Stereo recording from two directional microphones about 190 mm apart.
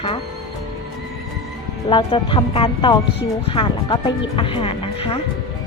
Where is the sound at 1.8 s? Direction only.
25° left (ahead or behind).